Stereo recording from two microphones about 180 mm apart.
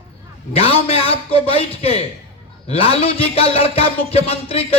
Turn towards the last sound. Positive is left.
turn(degrees=35)  # may be behind; listen again after turning